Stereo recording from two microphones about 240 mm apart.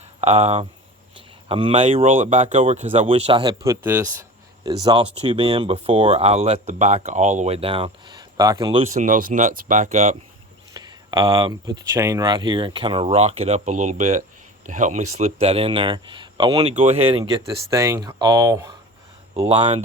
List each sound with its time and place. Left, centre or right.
0.2 s speech: right
9.0 s speech: right
10.8 s speech: centre
19.4 s speech: right